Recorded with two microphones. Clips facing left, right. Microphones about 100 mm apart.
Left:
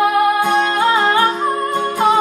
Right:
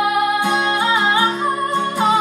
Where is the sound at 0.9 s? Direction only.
10° right (ahead or behind).